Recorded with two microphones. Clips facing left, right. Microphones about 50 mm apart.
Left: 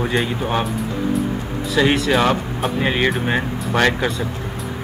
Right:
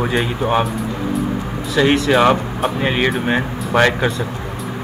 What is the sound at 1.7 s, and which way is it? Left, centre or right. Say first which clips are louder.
Speech: right 2 dB; centre.